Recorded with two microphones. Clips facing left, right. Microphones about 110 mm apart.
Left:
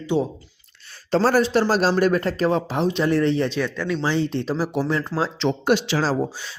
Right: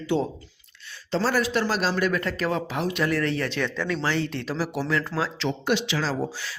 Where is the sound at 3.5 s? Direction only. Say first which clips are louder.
Left 3 dB; 5° left (ahead or behind).